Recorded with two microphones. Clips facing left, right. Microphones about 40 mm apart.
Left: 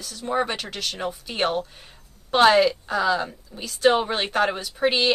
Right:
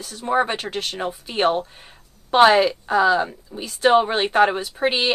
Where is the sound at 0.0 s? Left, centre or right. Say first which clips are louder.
Right 4 dB; right.